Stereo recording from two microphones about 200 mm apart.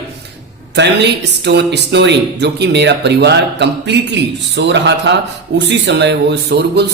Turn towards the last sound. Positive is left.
turn(degrees=-55)  # may be behind; listen again after turning